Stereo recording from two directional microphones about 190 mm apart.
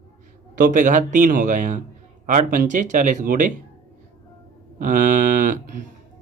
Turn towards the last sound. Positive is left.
turn(degrees=-45)  # may be behind; listen again after turning